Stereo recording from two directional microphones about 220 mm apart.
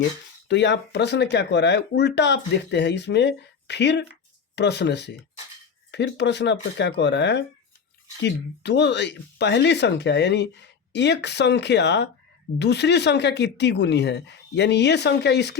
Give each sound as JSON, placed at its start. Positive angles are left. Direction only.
{"t": 0.4, "sound": "speech", "side_deg": 55}